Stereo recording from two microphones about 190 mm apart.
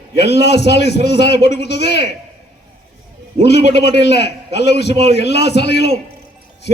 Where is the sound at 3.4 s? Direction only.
60° left (ahead or behind).